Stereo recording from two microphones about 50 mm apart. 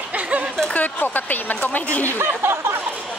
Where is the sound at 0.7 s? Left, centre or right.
Left.